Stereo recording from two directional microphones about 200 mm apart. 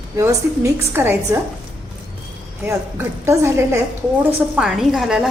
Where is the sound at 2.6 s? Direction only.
15° right (ahead or behind).